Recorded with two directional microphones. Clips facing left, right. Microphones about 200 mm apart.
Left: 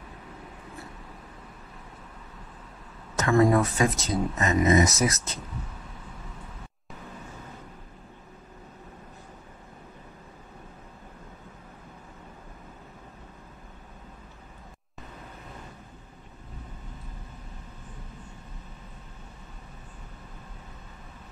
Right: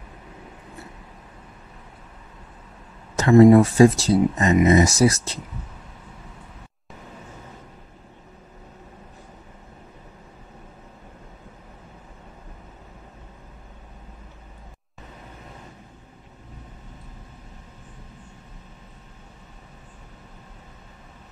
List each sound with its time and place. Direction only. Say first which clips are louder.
3.2 s speech: right 9 dB; 25° right (ahead or behind)